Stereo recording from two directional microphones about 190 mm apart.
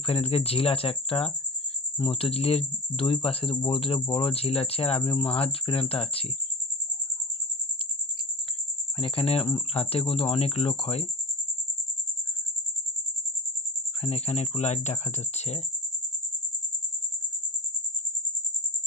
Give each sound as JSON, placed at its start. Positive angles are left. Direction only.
{"t": 0.0, "sound": "speech", "side_deg": 30}
{"t": 8.9, "sound": "speech", "side_deg": 30}
{"t": 14.0, "sound": "speech", "side_deg": 35}